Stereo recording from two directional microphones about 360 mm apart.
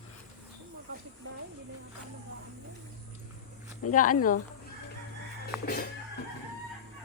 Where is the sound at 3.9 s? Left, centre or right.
Left.